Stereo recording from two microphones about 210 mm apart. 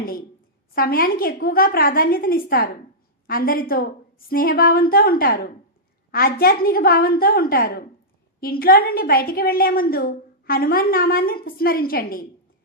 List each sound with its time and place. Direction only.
0.8 s a woman's voice: 45° left (ahead or behind)